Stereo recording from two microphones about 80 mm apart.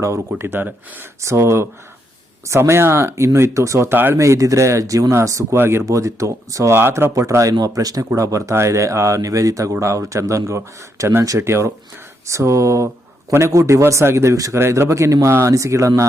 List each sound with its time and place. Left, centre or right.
0.3 s speech: right
4.2 s speech: right
5.5 s speech: right
5.8 s speech: right
6.7 s speech: right
7.5 s speech: right